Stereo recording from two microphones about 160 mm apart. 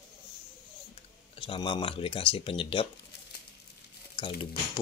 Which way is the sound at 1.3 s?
30° left (ahead or behind).